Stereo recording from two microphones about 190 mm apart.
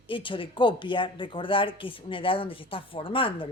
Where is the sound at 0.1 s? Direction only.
25° left (ahead or behind).